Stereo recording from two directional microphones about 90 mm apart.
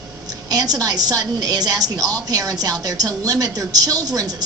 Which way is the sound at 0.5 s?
45° right (ahead or behind).